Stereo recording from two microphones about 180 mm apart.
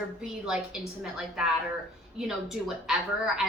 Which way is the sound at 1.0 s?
5° right (ahead or behind).